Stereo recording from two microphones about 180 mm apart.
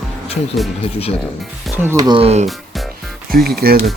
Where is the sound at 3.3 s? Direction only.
55° right (ahead or behind).